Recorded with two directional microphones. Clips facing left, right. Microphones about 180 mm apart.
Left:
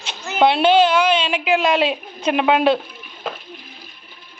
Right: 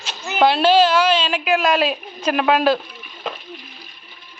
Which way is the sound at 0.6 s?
15° left (ahead or behind).